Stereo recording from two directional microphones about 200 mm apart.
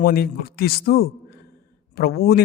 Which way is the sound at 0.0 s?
50° left (ahead or behind).